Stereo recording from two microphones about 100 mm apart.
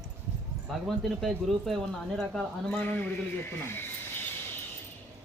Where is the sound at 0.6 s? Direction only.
Centre (ahead or behind).